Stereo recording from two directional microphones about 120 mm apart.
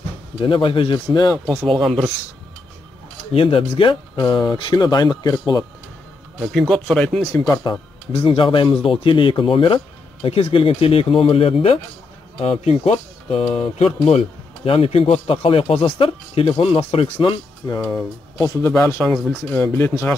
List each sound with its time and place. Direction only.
0.4 s speech: 45° left (ahead or behind)
1.4 s speech: 5° left (ahead or behind)
3.3 s speech: 50° left (ahead or behind); by 5.4 s 35° left (ahead or behind)
6.7 s speech: 5° left (ahead or behind)
7.3 s speech: 25° left (ahead or behind)
8.1 s speech: 45° left (ahead or behind)
17.6 s speech: 35° left (ahead or behind)
18.4 s speech: 25° left (ahead or behind)